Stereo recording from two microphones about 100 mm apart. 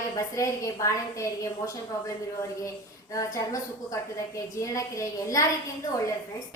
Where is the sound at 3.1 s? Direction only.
35° left (ahead or behind).